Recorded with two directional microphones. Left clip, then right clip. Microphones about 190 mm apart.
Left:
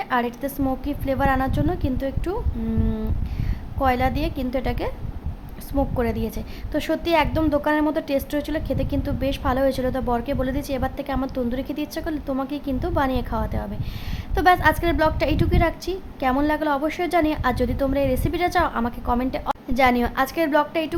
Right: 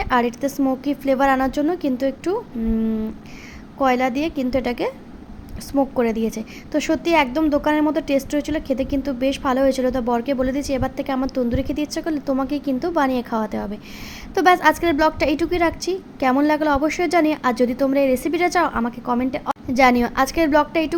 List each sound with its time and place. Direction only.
0.0 s a woman's voice: 15° right (ahead or behind)
3.8 s a woman's voice: 10° right (ahead or behind)